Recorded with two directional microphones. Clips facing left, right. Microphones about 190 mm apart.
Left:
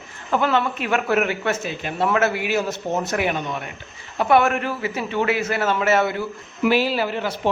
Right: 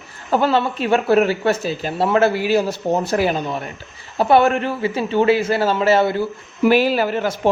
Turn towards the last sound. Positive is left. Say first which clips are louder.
# right 4 dB
turn(degrees=-45)  # may be behind; listen again after turning